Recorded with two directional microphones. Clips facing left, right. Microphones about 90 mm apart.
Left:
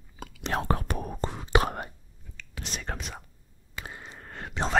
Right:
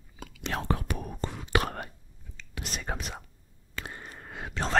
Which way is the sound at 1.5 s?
25° left (ahead or behind).